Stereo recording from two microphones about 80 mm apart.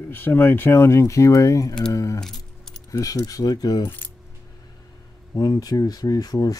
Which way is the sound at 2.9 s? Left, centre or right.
Left.